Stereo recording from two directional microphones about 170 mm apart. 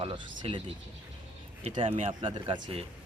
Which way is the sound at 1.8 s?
35° right (ahead or behind).